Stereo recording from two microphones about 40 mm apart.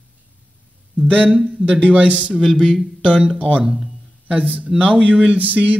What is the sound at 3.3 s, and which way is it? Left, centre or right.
Speech, right.